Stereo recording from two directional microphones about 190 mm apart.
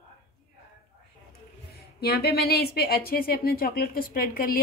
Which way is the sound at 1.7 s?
55° left (ahead or behind).